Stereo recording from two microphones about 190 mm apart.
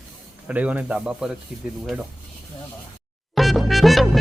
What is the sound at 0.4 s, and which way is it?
Speech, 5° right (ahead or behind).